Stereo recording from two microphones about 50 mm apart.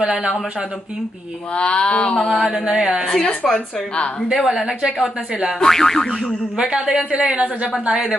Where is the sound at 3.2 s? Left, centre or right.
Centre.